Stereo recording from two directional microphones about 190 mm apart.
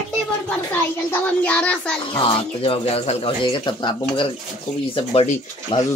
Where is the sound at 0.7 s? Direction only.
10° left (ahead or behind).